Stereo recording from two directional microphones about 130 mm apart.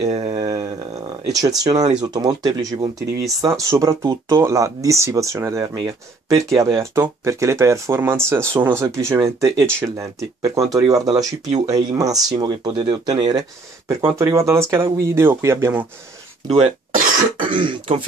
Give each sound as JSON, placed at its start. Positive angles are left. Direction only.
{"t": 0.1, "sound": "a sound", "side_deg": -45}
{"t": 1.6, "sound": "speech", "side_deg": -30}
{"t": 16.4, "sound": "speech", "side_deg": -55}
{"t": 17.5, "sound": "speech", "side_deg": -40}